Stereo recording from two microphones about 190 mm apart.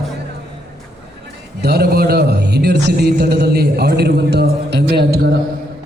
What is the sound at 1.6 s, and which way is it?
A man's voice, 55° right (ahead or behind).